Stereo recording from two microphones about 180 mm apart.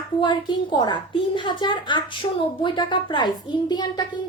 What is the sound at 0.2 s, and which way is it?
A woman's voice, 25° left (ahead or behind).